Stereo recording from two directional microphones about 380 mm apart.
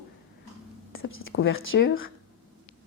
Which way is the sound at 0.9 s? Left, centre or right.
Left.